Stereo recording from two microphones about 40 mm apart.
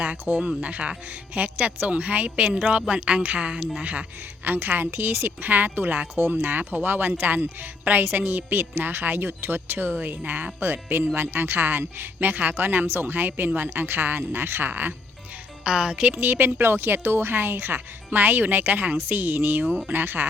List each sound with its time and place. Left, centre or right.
0.3 s a woman's voice: right
2.8 s a woman's voice: right
4.4 s speech: right
4.9 s speech: right
15.6 s speech: right
16.2 s a woman's voice: right
17.7 s speech: right